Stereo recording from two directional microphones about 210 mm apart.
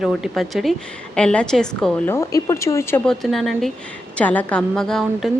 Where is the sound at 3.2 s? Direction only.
Centre (ahead or behind).